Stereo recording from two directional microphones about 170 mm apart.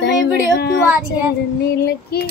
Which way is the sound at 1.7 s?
65° left (ahead or behind).